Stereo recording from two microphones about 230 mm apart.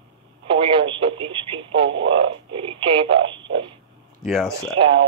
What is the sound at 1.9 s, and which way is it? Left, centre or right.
Speech, right.